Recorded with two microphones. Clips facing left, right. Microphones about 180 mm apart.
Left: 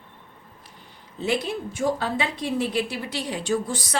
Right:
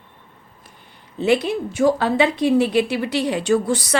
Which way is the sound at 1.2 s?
70° right (ahead or behind).